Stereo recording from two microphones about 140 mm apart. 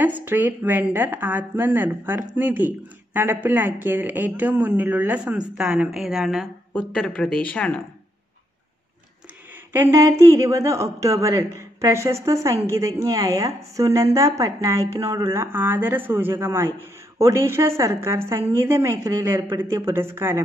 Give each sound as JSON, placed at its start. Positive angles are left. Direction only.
{"t": 0.0, "sound": "a woman's voice", "side_deg": -15}
{"t": 9.7, "sound": "a woman's voice", "side_deg": -20}